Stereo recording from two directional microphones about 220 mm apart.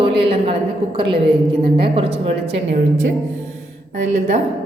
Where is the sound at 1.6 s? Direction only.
25° right (ahead or behind).